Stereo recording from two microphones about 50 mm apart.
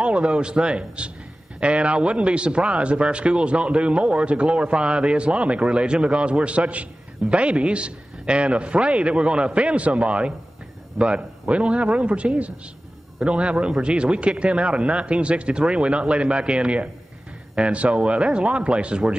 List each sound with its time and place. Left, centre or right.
0.0 s speech: right